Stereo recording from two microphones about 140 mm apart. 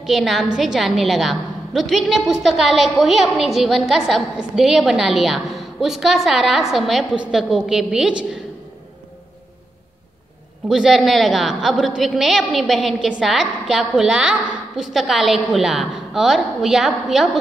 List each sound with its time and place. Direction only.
0.0 s a woman's voice: centre (ahead or behind)
10.7 s a woman's voice: 5° right (ahead or behind)